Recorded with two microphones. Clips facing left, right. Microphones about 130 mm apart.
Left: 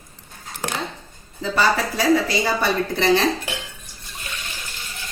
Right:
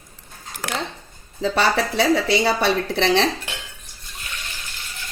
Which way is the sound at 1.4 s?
70° right (ahead or behind).